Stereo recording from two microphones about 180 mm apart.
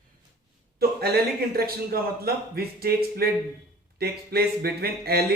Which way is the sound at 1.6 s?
55° right (ahead or behind).